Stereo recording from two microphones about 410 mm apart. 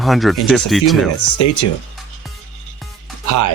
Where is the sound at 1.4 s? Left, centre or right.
Left.